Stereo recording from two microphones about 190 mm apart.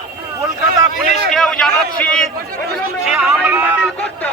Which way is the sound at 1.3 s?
5° left (ahead or behind).